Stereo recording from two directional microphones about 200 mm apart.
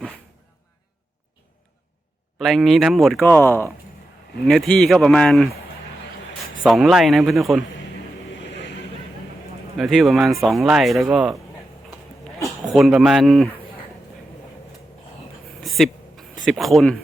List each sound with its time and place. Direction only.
2.4 s speech: centre (ahead or behind)
6.7 s speech: centre (ahead or behind)
8.4 s vehicle: 60° left (ahead or behind)
9.7 s speech: centre (ahead or behind)
12.7 s speech: centre (ahead or behind)
15.6 s a sound: centre (ahead or behind)
16.5 s speech: centre (ahead or behind)